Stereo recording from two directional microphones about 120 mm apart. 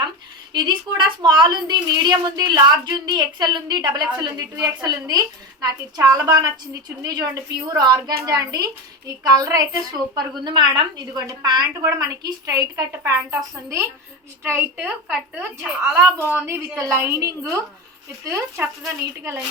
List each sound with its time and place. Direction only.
0.5 s a woman's voice: 35° right (ahead or behind); by 15.7 s 10° right (ahead or behind)
15.8 s a woman's voice: 20° right (ahead or behind)